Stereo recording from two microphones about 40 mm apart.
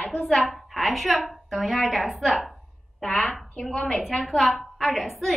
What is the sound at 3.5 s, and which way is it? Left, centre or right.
Speech, left.